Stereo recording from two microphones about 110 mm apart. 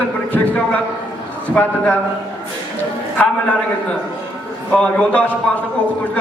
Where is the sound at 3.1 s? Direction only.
10° left (ahead or behind).